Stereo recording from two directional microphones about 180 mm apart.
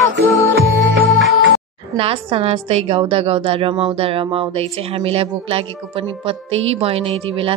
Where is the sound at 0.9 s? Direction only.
80° right.